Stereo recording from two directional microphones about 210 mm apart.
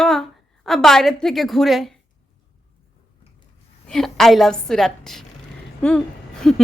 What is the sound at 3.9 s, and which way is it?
A woman's voice, centre (ahead or behind).